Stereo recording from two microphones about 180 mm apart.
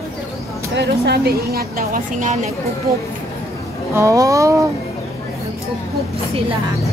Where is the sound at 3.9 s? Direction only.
15° right (ahead or behind).